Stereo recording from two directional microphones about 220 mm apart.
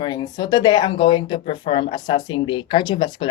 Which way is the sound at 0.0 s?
20° left (ahead or behind).